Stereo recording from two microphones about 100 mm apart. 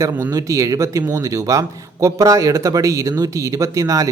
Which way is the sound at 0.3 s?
35° right (ahead or behind).